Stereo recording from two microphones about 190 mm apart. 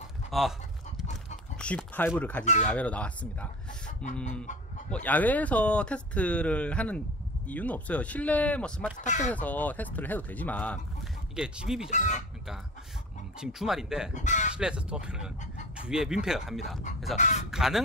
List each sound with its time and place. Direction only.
0.3 s speech: centre (ahead or behind)
1.6 s speech: 5° left (ahead or behind)
2.4 s speech: 40° left (ahead or behind)
2.7 s speech: 5° left (ahead or behind)
4.9 s speech: 10° left (ahead or behind)
9.0 s speech: 40° left (ahead or behind)
9.3 s speech: 10° left (ahead or behind)
11.3 s speech: 5° right (ahead or behind)
11.9 s speech: 40° left (ahead or behind)
13.4 s speech: centre (ahead or behind)
14.1 s speech: 40° left (ahead or behind)
14.6 s speech: 5° right (ahead or behind)
17.2 s speech: 40° left (ahead or behind)
17.5 s speech: 5° right (ahead or behind)